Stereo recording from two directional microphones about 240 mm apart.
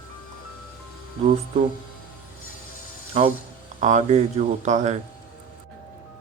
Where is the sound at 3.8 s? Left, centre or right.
Right.